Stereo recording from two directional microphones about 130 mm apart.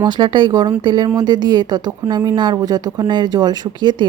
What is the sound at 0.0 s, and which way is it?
Speech, 35° right (ahead or behind).